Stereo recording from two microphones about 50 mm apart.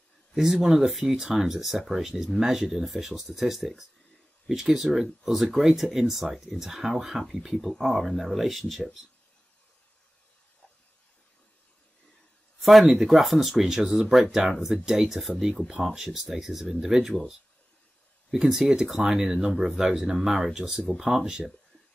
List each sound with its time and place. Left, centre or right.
0.4 s speech: centre
12.5 s a sound: centre
12.9 s speech: centre
15.6 s speech: centre
18.3 s speech: centre